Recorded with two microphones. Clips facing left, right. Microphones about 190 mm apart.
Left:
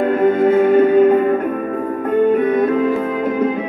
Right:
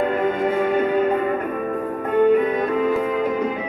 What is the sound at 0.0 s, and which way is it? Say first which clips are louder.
Music: left 7 dB; 50° left (ahead or behind).